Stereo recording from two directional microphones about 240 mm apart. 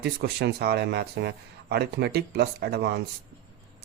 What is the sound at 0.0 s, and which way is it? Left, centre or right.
Speech, right.